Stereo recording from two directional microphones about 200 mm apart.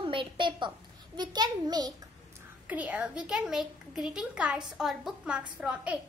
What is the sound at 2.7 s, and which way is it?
A woman's voice, 10° right (ahead or behind).